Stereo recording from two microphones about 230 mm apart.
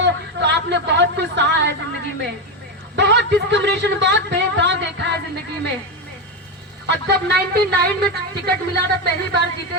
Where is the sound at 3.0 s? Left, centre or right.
Right.